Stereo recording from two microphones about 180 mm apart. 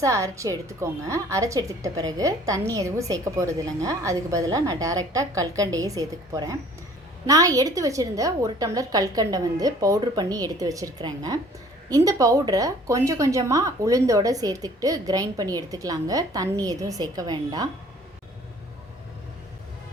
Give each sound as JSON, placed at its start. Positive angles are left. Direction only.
{"t": 0.0, "sound": "a woman's voice", "side_deg": -15}